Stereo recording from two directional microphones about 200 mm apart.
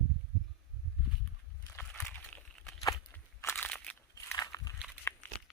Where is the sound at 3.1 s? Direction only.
10° left (ahead or behind).